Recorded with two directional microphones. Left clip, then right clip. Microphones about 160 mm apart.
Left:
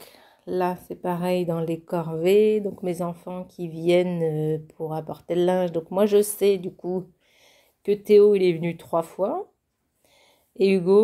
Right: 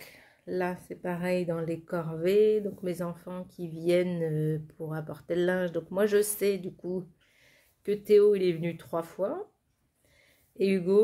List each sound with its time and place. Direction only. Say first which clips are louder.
0.0 s speech: left 5 dB; 30° left (ahead or behind)
10.6 s speech: left 7 dB; 25° left (ahead or behind)